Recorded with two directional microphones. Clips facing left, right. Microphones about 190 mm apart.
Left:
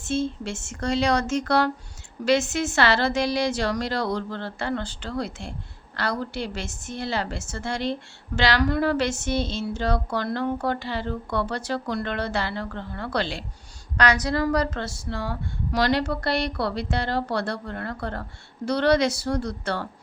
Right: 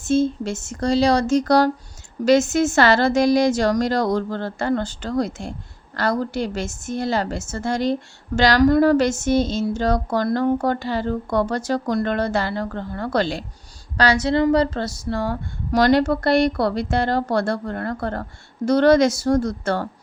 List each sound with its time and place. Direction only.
0.0 s a woman's voice: 45° right (ahead or behind)
13.9 s a woman's voice: 30° right (ahead or behind); by 19.9 s 45° right (ahead or behind)